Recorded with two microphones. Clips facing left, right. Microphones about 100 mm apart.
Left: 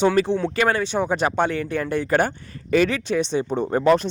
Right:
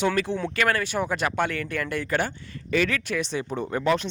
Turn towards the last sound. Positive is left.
turn(degrees=40)  # may be behind; listen again after turning